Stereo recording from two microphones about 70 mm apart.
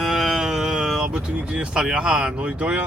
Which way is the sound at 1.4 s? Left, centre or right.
Centre.